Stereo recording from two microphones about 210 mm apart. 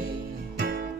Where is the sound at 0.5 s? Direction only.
45° right (ahead or behind).